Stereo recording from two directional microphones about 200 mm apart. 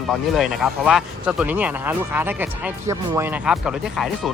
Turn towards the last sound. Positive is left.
turn(degrees=0)  # may be behind; listen again after turning